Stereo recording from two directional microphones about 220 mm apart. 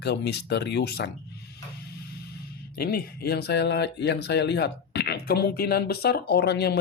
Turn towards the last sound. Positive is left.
turn(degrees=50)  # may be behind; listen again after turning